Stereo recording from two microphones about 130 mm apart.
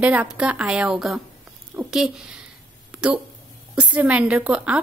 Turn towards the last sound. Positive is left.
turn(degrees=-10)  # may be behind; listen again after turning